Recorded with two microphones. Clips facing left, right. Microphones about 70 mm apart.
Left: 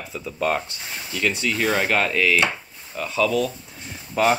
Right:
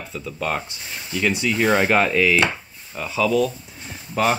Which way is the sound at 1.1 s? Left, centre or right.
Centre.